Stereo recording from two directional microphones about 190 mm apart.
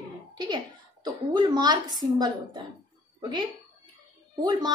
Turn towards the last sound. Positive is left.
turn(degrees=-20)  # may be behind; listen again after turning